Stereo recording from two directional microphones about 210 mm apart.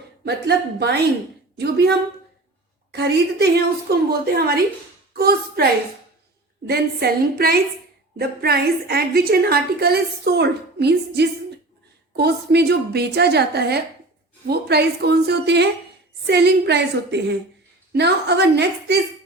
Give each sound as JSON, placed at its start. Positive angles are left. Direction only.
{"t": 0.3, "sound": "a woman's voice", "side_deg": -50}
{"t": 6.7, "sound": "a woman's voice", "side_deg": -50}